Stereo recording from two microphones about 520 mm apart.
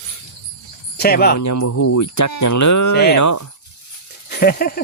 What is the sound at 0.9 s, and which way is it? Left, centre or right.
Speech, centre.